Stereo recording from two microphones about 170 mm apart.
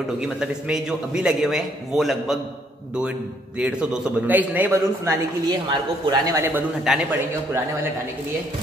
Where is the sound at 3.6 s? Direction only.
5° right (ahead or behind).